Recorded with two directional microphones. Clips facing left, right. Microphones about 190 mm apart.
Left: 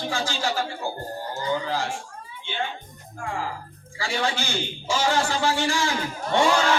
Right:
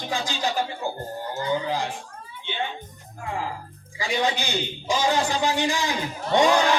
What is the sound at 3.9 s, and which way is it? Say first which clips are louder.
A man's voice: right 2 dB; 20° right (ahead or behind).